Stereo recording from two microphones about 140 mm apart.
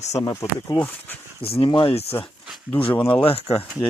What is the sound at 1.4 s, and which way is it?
Speech, 40° left (ahead or behind).